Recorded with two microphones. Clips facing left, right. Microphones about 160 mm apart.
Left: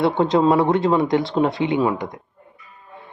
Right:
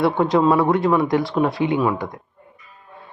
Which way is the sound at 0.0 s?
25° left (ahead or behind).